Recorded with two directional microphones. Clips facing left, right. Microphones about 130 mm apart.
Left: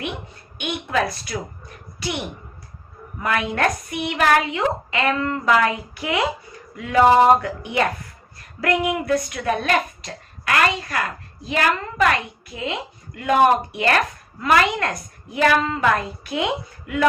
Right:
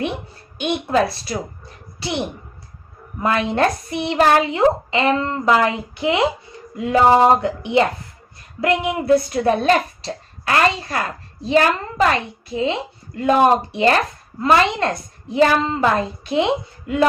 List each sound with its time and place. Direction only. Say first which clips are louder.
0.6 s a woman's voice: right 5 dB; 30° right (ahead or behind)